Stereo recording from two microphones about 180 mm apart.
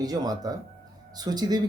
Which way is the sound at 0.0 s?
20° right (ahead or behind).